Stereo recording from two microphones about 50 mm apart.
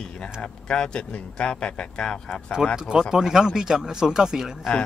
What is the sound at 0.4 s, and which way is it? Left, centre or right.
Speech, centre.